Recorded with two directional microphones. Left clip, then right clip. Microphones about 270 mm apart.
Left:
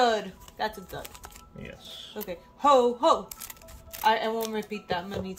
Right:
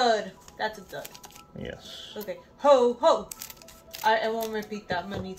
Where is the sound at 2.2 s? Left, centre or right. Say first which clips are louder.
Right 1 dB; left.